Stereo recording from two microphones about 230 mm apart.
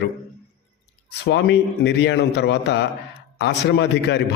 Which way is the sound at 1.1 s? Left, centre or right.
Left.